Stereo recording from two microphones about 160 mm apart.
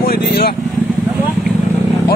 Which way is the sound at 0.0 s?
70° left (ahead or behind).